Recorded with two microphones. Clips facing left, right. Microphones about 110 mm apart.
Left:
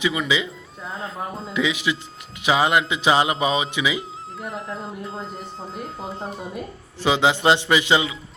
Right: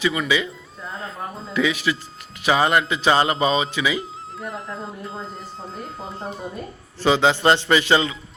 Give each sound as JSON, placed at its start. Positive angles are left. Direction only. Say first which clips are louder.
{"t": 0.0, "sound": "a man's voice", "louder": "right 1 dB", "side_deg": 15}
{"t": 0.9, "sound": "speech", "louder": "left 1 dB", "side_deg": 0}
{"t": 1.5, "sound": "a man's voice", "louder": "right 2 dB", "side_deg": 15}
{"t": 4.4, "sound": "speech", "louder": "even", "side_deg": 0}
{"t": 7.0, "sound": "a man's voice", "louder": "right 1 dB", "side_deg": 15}